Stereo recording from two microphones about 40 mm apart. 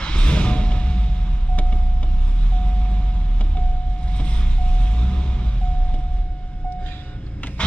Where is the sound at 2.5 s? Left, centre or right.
Left.